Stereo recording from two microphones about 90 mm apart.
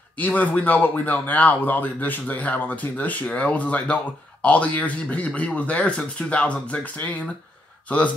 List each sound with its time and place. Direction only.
0.2 s speech: 20° left (ahead or behind)